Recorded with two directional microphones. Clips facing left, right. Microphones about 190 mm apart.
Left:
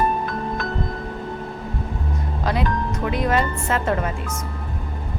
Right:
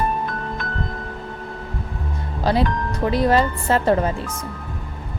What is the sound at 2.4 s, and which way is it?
Speech, 30° right (ahead or behind).